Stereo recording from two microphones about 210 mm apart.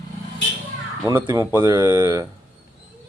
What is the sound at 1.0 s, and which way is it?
Speech, 20° right (ahead or behind).